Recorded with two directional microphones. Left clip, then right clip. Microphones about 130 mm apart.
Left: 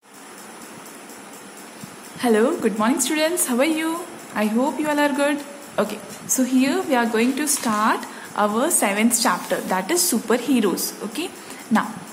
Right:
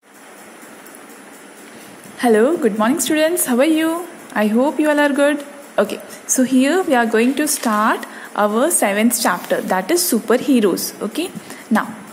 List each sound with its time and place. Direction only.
2.1 s a woman's voice: 35° right (ahead or behind)